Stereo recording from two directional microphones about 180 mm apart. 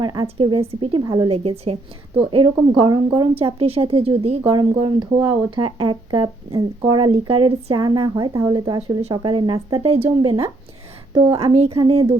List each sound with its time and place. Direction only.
0.0 s speech: 25° right (ahead or behind)
1.3 s a woman's voice: 30° right (ahead or behind)